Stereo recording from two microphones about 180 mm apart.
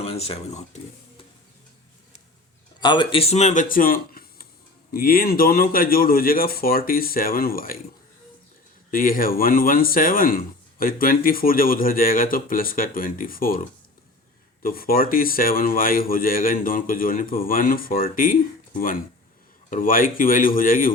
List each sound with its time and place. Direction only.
0.0 s speech: 35° left (ahead or behind)
2.8 s speech: 25° left (ahead or behind); by 7.8 s 55° left (ahead or behind)
8.9 s speech: 50° left (ahead or behind)